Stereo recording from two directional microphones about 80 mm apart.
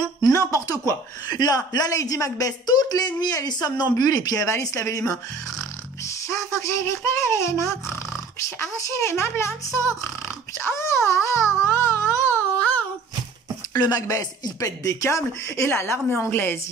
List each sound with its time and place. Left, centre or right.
0.3 s a woman's voice: left
12.5 s a sound: centre
13.7 s speech: left